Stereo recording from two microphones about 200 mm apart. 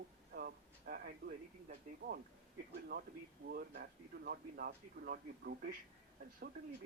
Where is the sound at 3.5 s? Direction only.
50° right (ahead or behind).